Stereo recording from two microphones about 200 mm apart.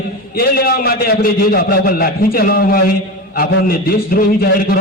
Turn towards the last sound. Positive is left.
turn(degrees=50)  # may be behind; listen again after turning